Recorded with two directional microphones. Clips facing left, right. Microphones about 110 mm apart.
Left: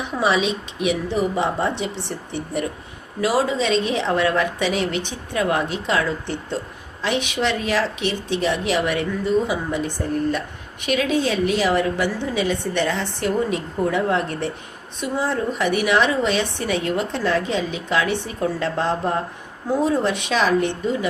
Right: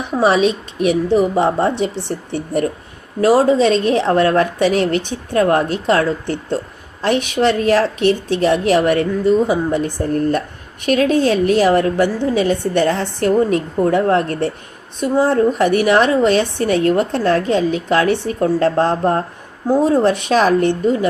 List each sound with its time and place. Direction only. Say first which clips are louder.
0.1 s a woman's voice: right 7 dB; 45° right (ahead or behind)